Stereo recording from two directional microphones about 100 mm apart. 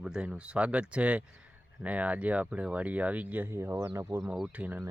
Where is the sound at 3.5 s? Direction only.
25° right (ahead or behind).